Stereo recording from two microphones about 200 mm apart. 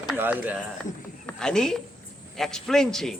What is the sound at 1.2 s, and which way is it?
Speech, 5° left (ahead or behind).